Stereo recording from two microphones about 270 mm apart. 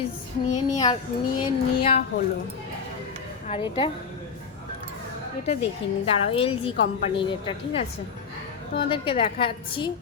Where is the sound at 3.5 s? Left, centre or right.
Centre.